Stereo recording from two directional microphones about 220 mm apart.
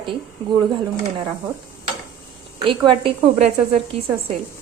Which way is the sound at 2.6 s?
25° right (ahead or behind).